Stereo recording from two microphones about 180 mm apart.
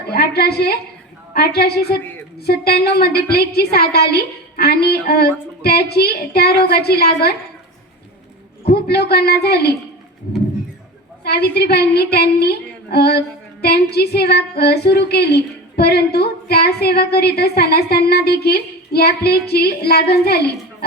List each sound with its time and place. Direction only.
0.1 s a woman's voice: 60° left (ahead or behind)
8.7 s a woman's voice: 60° left (ahead or behind)
11.2 s a woman's voice: 65° left (ahead or behind)